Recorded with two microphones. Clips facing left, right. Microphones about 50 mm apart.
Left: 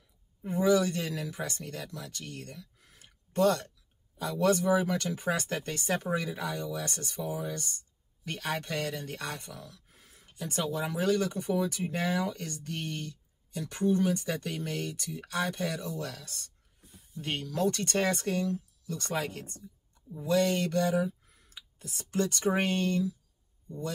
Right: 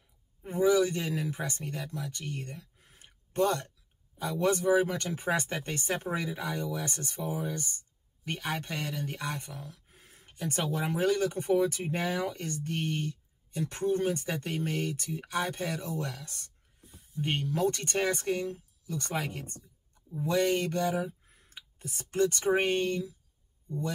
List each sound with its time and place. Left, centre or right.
0.5 s speech: right
0.7 s speech: centre
2.0 s a sound: right
4.2 s speech: right
16.1 s speech: centre